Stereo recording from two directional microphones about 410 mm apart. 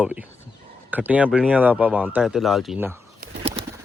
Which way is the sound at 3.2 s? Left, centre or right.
Centre.